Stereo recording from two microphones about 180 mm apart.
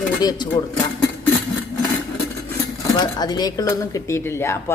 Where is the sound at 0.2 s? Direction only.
20° left (ahead or behind).